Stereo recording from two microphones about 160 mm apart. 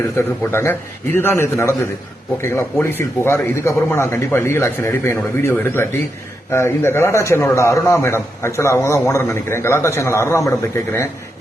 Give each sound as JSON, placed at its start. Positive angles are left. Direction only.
{"t": 0.5, "sound": "a man's voice", "side_deg": 15}